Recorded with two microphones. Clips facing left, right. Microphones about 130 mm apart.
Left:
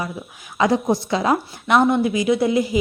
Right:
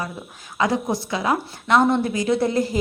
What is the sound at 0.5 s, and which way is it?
A woman's voice, 20° left (ahead or behind).